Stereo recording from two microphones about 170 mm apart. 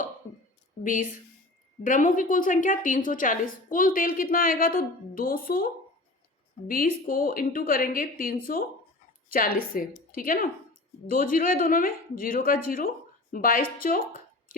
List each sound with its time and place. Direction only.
0.9 s a woman's voice: 50° left (ahead or behind)